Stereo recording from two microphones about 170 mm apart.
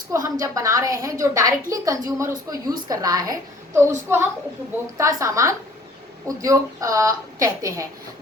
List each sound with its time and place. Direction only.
0.1 s a woman's voice: 20° right (ahead or behind)